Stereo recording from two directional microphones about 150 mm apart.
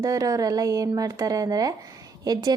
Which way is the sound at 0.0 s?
20° right (ahead or behind).